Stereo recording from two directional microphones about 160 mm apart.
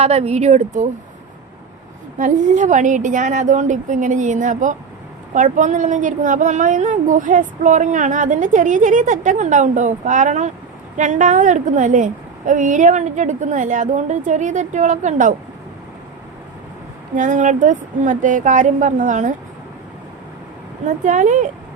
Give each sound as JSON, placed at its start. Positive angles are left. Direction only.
{"t": 0.0, "sound": "a woman's voice", "side_deg": -40}
{"t": 2.1, "sound": "a woman's voice", "side_deg": -50}
{"t": 17.2, "sound": "a woman's voice", "side_deg": -50}
{"t": 21.0, "sound": "a woman's voice", "side_deg": -50}